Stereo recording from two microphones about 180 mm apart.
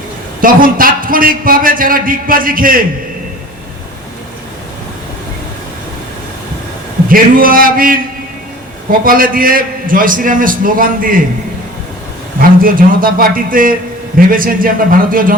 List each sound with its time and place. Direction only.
0.4 s a man's voice: 50° right (ahead or behind)
7.1 s a man's voice: 50° right (ahead or behind)
12.4 s a man's voice: 50° right (ahead or behind)